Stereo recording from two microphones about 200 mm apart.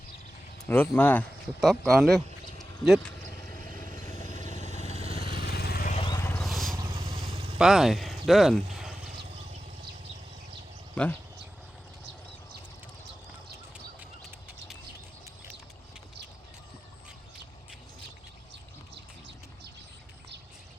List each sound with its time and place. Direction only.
0.6 s speech: 10° left (ahead or behind)
2.8 s a sound: centre (ahead or behind)
4.4 s vehicle: 30° left (ahead or behind)
5.1 s vehicle: 45° left (ahead or behind)
5.9 s vehicle: 25° left (ahead or behind)
6.1 s vehicle: 10° left (ahead or behind)
6.4 s vehicle: centre (ahead or behind)
6.7 s vehicle: 20° right (ahead or behind)
7.6 s speech: centre (ahead or behind)
10.9 s speech: 5° left (ahead or behind)
14.3 s duck: 10° right (ahead or behind)